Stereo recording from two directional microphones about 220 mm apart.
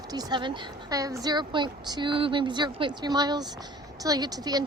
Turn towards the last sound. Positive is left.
turn(degrees=-15)  # may be behind; listen again after turning